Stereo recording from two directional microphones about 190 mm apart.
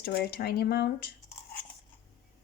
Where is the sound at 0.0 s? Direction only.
55° left (ahead or behind).